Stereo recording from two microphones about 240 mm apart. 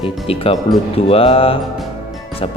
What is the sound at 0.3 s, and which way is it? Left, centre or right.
Music, left.